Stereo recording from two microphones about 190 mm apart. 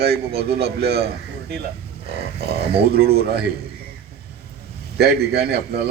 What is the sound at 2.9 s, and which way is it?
Speech, 55° right (ahead or behind).